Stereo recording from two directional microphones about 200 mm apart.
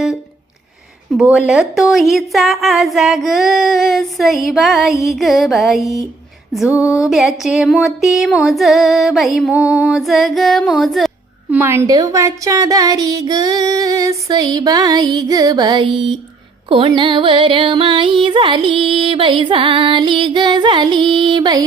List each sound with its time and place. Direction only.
1.1 s a woman's voice: 5° right (ahead or behind)
11.5 s speech: 10° right (ahead or behind)
16.6 s music: 25° right (ahead or behind)